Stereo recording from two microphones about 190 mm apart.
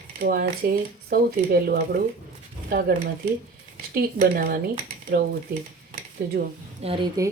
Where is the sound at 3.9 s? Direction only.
55° right (ahead or behind).